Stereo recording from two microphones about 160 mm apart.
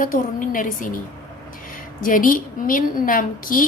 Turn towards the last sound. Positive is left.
turn(degrees=60)  # may be behind; listen again after turning